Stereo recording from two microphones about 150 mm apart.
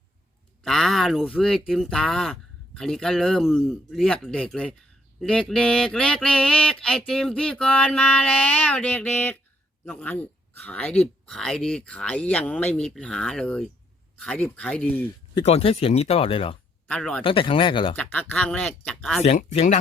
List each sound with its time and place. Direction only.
0.6 s speech: centre (ahead or behind)
5.2 s a sound: 5° left (ahead or behind)
15.4 s speech: 40° left (ahead or behind)
16.8 s speech: 5° left (ahead or behind)
17.2 s speech: 35° left (ahead or behind)
17.9 s a sound: 10° left (ahead or behind)
19.2 s speech: 50° left (ahead or behind)